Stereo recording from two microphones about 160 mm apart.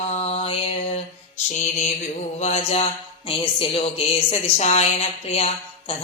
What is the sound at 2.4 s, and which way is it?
A woman's voice, 40° left (ahead or behind).